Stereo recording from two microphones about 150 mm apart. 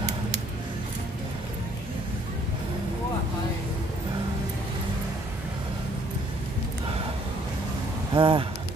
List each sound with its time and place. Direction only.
8.1 s speech: 35° right (ahead or behind)